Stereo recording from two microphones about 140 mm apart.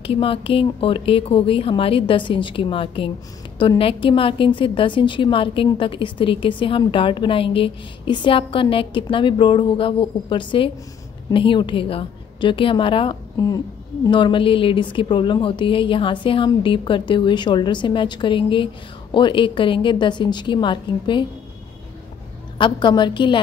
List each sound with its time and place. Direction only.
0.0 s a woman's voice: 40° left (ahead or behind)
22.6 s a woman's voice: 35° left (ahead or behind)